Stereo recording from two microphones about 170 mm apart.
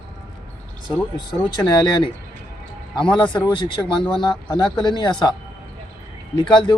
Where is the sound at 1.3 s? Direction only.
25° left (ahead or behind).